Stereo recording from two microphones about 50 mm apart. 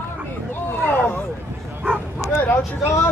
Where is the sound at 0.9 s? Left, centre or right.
Left.